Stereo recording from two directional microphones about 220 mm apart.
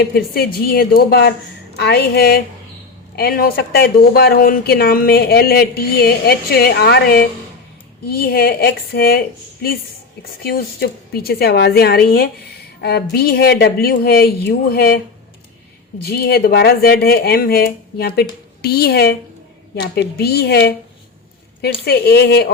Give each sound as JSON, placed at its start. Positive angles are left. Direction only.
{"t": 0.0, "sound": "speech", "side_deg": 45}
{"t": 16.0, "sound": "speech", "side_deg": 45}
{"t": 21.8, "sound": "speech", "side_deg": 45}